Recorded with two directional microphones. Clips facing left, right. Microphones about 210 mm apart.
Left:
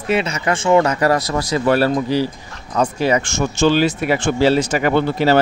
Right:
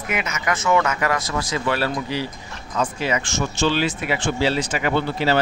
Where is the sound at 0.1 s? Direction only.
30° left (ahead or behind).